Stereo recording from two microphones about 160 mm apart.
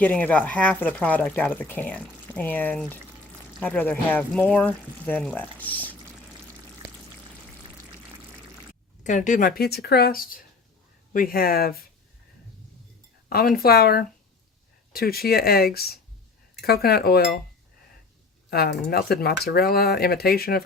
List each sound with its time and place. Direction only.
0.0 s speech: 10° left (ahead or behind)
9.0 s speech: 50° left (ahead or behind); by 11.9 s 70° left (ahead or behind)
13.2 s a sound: 65° left (ahead or behind)
13.6 s speech: 70° left (ahead or behind)
18.5 s speech: 80° left